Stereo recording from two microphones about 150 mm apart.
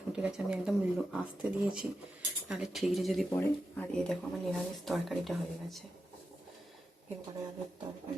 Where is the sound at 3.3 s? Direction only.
10° left (ahead or behind).